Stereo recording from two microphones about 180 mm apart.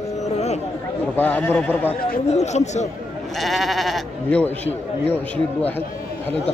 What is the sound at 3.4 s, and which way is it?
Speech, centre (ahead or behind).